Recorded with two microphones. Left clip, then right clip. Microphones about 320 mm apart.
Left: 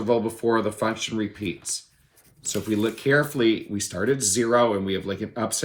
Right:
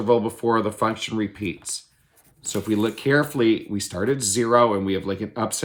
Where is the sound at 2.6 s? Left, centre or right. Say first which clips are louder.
Right 1 dB; right.